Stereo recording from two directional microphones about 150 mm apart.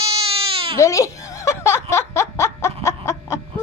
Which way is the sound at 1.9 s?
20° left (ahead or behind).